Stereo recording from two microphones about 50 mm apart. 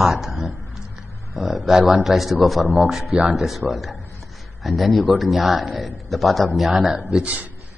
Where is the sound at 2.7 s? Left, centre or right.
Centre.